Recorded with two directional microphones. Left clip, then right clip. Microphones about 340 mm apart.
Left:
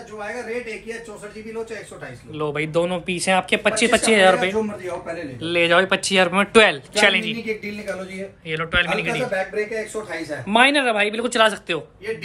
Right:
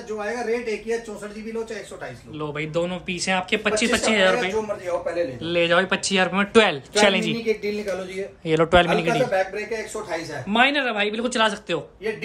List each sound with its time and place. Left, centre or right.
2.3 s speech: centre
8.5 s speech: centre
10.5 s speech: centre